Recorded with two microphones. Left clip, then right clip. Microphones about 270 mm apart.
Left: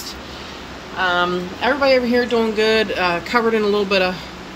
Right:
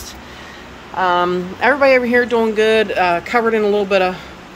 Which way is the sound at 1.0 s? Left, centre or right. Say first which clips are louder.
Right 3 dB; centre.